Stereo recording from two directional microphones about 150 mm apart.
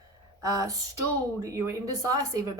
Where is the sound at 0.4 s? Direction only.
20° right (ahead or behind).